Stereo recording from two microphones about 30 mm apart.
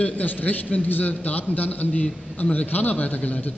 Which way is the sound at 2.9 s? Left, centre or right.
Left.